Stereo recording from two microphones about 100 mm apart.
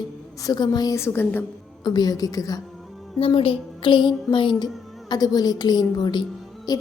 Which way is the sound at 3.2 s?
70° left (ahead or behind).